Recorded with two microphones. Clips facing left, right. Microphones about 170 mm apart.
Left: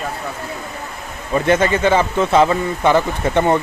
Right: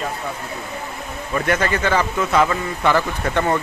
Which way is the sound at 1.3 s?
25° left (ahead or behind).